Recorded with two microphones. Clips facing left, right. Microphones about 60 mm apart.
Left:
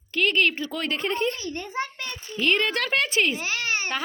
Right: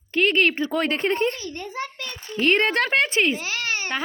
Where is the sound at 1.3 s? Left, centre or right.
Left.